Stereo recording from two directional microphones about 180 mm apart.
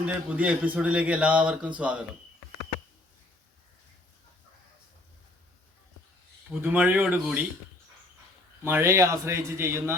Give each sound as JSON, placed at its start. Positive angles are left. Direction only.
{"t": 0.0, "sound": "a man's voice", "side_deg": -5}
{"t": 6.5, "sound": "a man's voice", "side_deg": -10}
{"t": 8.6, "sound": "a man's voice", "side_deg": -15}